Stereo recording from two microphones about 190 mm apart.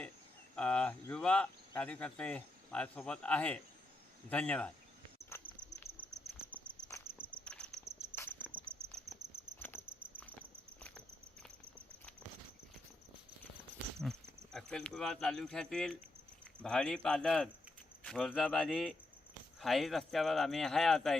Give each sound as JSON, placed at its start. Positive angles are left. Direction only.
{"t": 0.5, "sound": "speech", "side_deg": 5}
{"t": 5.3, "sound": "cricket", "side_deg": 15}
{"t": 7.2, "sound": "insect", "side_deg": 5}
{"t": 8.1, "sound": "cricket", "side_deg": 10}
{"t": 8.7, "sound": "cricket", "side_deg": -10}
{"t": 9.6, "sound": "patter", "side_deg": 10}
{"t": 14.0, "sound": "speech", "side_deg": 0}